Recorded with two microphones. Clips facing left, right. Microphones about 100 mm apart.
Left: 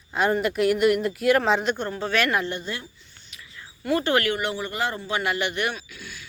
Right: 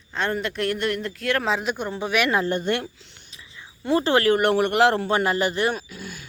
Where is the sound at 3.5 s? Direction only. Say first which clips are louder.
Right 2 dB; 25° right (ahead or behind).